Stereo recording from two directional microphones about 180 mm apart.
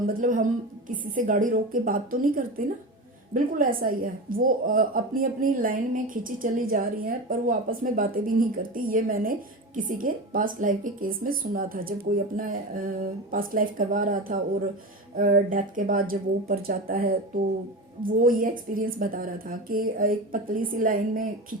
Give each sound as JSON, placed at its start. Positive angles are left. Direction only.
{"t": 0.0, "sound": "a woman's voice", "side_deg": -50}
{"t": 18.2, "sound": "a woman's voice", "side_deg": -50}